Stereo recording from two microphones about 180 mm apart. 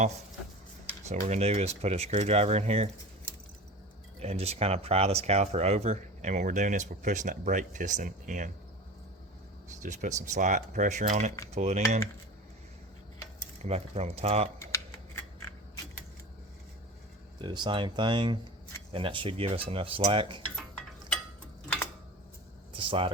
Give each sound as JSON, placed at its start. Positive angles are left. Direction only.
{"t": 1.0, "sound": "speech", "side_deg": -40}
{"t": 4.2, "sound": "speech", "side_deg": -35}
{"t": 9.8, "sound": "speech", "side_deg": -45}
{"t": 13.6, "sound": "speech", "side_deg": -35}
{"t": 14.6, "sound": "scissors", "side_deg": 15}
{"t": 17.4, "sound": "cutlery", "side_deg": -25}
{"t": 20.6, "sound": "a sound", "side_deg": 0}
{"t": 22.7, "sound": "a sound", "side_deg": -30}